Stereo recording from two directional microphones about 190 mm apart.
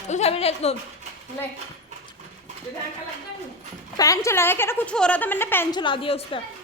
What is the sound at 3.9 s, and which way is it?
A woman's voice, 20° left (ahead or behind).